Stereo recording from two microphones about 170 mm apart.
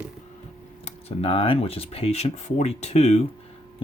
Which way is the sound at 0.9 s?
35° left (ahead or behind).